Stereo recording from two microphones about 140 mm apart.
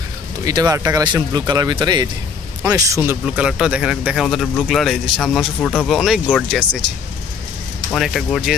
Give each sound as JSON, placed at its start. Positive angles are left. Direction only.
{"t": 0.5, "sound": "speech", "side_deg": -25}
{"t": 3.3, "sound": "speech", "side_deg": -5}
{"t": 5.9, "sound": "speech", "side_deg": 0}
{"t": 7.9, "sound": "speech", "side_deg": 0}